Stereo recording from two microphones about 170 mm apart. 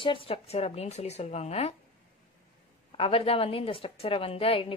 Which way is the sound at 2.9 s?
35° left (ahead or behind).